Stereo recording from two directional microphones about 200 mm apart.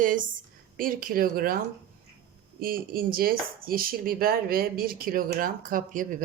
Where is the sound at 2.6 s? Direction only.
45° right (ahead or behind).